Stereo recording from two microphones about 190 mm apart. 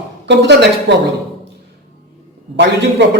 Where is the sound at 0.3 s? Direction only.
65° right (ahead or behind).